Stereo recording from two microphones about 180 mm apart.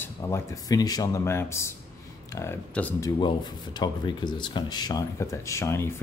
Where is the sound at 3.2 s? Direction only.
25° left (ahead or behind).